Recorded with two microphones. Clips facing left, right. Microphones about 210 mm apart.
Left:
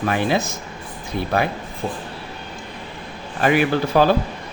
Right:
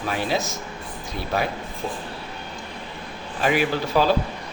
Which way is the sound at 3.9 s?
50° left (ahead or behind).